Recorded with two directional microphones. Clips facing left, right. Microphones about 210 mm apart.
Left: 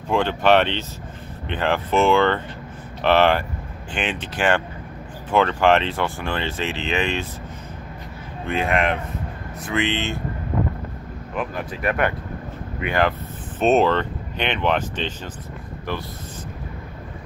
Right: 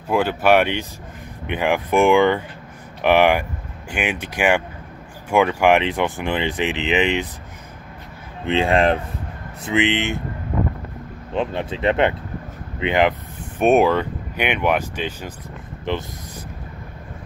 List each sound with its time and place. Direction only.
0.1 s speech: 5° right (ahead or behind)
8.5 s speech: 30° right (ahead or behind)
9.6 s speech: 20° right (ahead or behind)
11.3 s speech: 25° right (ahead or behind); by 15.3 s 10° right (ahead or behind)
15.9 s speech: 20° right (ahead or behind)